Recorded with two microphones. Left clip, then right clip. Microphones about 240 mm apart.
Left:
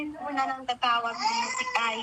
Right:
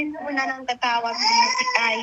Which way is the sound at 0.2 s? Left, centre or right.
Right.